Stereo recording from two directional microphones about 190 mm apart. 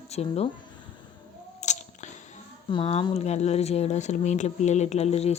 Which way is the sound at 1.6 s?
40° left (ahead or behind).